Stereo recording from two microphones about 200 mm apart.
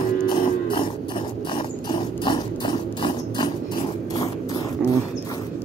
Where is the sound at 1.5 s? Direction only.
25° left (ahead or behind).